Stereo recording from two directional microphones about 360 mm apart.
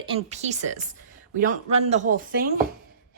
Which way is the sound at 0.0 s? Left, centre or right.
Centre.